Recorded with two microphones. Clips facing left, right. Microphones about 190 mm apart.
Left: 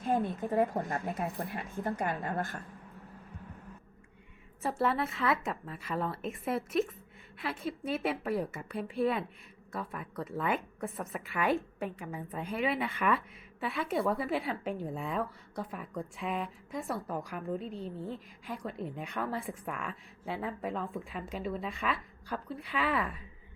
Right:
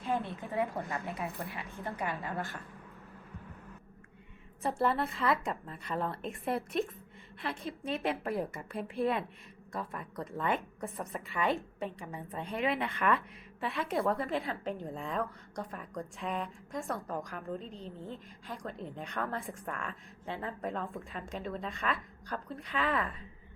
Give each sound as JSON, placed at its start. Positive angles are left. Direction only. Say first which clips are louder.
{"t": 0.0, "sound": "a sound", "louder": "left 4 dB", "side_deg": 50}
{"t": 0.5, "sound": "a woman's voice", "louder": "left 4 dB", "side_deg": 40}
{"t": 1.0, "sound": "a woman's voice", "louder": "left 3 dB", "side_deg": 50}
{"t": 4.8, "sound": "a woman's voice", "louder": "even", "side_deg": 0}